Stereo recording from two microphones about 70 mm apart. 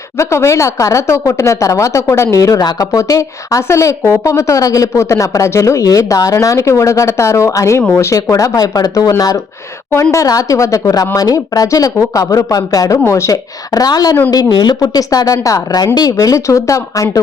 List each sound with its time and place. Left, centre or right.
0.2 s speech: left
2.6 s speech: left
8.5 s speech: left
9.9 s speech: left
11.2 s speech: left
13.1 s speech: left
13.3 s speech: left
16.1 s speech: left